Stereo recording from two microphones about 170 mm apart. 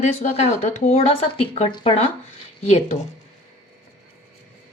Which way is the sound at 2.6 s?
45° left (ahead or behind).